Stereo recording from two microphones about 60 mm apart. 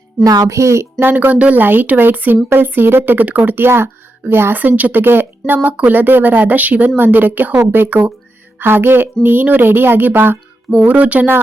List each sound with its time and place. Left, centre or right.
0.3 s speech: right
1.0 s speech: right
5.6 s speech: right